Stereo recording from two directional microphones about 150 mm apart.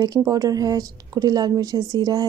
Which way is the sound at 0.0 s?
25° right (ahead or behind).